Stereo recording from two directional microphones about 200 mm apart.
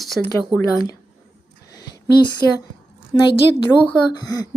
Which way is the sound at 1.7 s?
20° left (ahead or behind).